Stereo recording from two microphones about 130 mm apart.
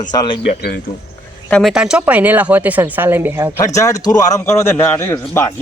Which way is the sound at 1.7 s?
5° right (ahead or behind).